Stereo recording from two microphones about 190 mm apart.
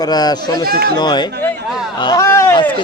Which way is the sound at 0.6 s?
50° right (ahead or behind).